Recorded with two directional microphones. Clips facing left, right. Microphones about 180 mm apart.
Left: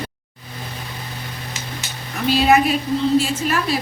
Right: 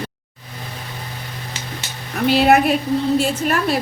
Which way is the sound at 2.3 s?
60° right (ahead or behind).